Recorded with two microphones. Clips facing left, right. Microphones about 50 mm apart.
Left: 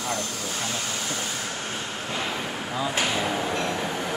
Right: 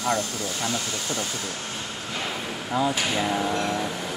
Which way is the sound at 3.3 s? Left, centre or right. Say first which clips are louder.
Right 1 dB; left.